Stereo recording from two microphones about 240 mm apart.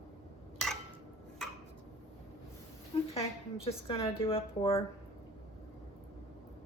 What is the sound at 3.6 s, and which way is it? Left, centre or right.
A woman's voice, left.